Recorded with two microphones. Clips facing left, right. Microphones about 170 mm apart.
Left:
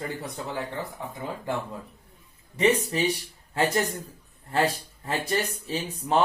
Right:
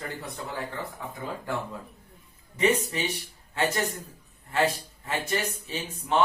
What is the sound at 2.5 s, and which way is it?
Speech, 30° left (ahead or behind).